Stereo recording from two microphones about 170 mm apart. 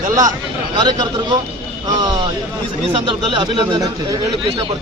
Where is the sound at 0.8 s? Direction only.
25° right (ahead or behind).